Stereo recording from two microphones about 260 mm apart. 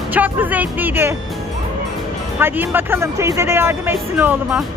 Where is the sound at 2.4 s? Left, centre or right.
Centre.